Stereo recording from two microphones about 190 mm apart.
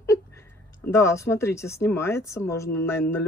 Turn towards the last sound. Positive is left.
turn(degrees=15)  # may be behind; listen again after turning